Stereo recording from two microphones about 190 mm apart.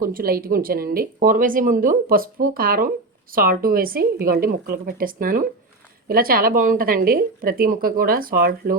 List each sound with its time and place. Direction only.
0.0 s speech: 50° right (ahead or behind)